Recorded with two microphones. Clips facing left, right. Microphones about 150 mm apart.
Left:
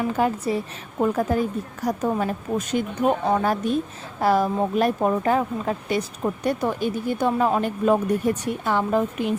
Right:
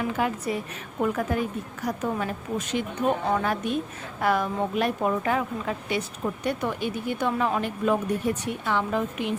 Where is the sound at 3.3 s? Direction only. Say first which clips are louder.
Left 4 dB; 35° left (ahead or behind).